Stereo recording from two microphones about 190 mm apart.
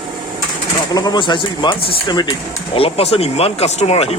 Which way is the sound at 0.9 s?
20° left (ahead or behind).